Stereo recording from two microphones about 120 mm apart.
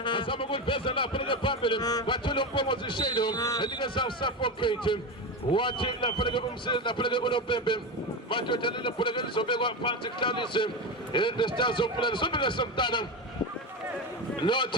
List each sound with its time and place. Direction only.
0.0 s speech: 45° left (ahead or behind)
3.8 s speech: 45° left (ahead or behind)
14.4 s speech: 40° left (ahead or behind)